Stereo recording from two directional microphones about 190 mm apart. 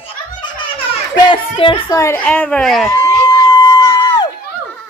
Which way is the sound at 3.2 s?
20° left (ahead or behind).